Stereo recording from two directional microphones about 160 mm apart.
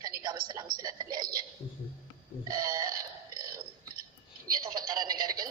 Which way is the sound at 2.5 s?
20° right (ahead or behind).